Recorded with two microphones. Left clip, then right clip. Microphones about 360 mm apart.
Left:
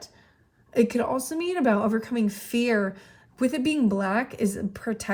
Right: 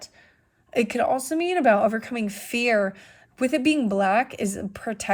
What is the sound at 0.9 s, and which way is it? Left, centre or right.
A woman's voice, centre.